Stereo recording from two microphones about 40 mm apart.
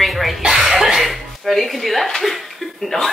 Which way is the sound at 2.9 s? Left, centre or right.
Centre.